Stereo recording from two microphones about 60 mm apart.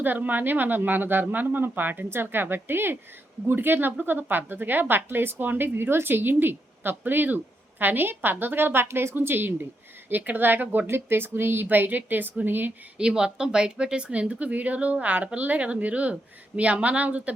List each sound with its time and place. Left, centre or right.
0.0 s speech: right
13.0 s a woman's voice: centre